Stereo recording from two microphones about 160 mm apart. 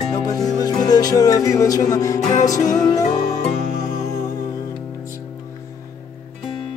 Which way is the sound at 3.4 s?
50° left (ahead or behind).